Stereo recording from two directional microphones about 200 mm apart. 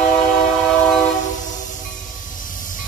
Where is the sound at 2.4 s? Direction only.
40° left (ahead or behind).